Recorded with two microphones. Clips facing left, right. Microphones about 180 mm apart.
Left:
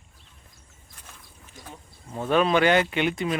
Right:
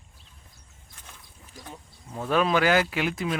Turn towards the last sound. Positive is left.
turn(degrees=0)  # may be behind; listen again after turning